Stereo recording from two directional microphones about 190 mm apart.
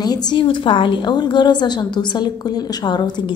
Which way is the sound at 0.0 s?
20° left (ahead or behind).